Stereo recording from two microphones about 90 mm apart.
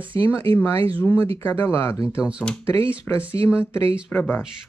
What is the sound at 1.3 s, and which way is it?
Speech, 25° left (ahead or behind).